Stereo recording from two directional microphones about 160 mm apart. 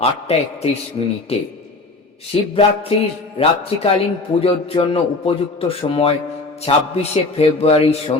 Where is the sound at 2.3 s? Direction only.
40° left (ahead or behind).